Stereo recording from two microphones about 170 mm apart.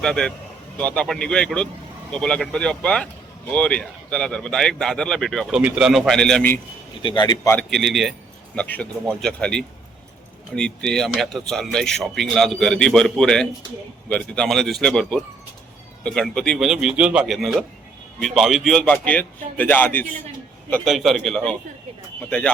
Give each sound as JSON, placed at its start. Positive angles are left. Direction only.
{"t": 0.0, "sound": "speech", "side_deg": 5}
{"t": 7.0, "sound": "speech", "side_deg": 25}
{"t": 7.5, "sound": "a man's voice", "side_deg": 0}
{"t": 20.8, "sound": "a man's voice", "side_deg": 0}